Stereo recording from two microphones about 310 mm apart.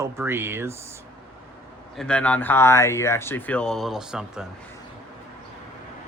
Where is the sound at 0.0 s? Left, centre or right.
Centre.